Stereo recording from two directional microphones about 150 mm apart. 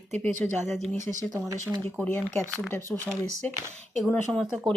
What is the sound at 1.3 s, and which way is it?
Speech, 20° right (ahead or behind).